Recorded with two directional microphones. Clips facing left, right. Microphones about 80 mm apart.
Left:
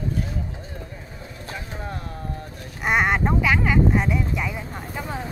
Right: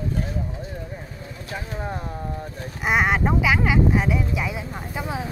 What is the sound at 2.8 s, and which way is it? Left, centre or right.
Speech, centre.